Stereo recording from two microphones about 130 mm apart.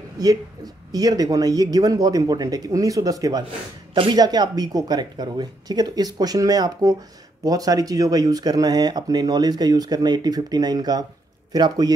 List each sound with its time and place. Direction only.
0.9 s speech: 30° right (ahead or behind)